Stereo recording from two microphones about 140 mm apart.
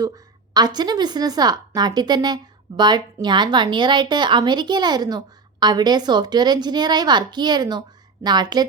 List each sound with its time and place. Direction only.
0.5 s a woman's voice: 30° right (ahead or behind)